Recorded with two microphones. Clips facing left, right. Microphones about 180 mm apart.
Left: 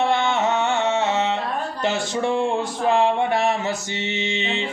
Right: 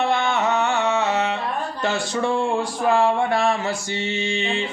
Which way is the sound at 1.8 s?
20° left (ahead or behind).